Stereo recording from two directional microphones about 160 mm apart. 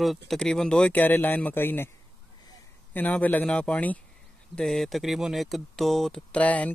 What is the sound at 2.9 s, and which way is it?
Speech, 10° left (ahead or behind).